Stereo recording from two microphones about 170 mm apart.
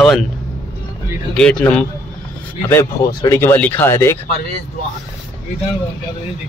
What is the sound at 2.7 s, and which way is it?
Speech, 15° left (ahead or behind).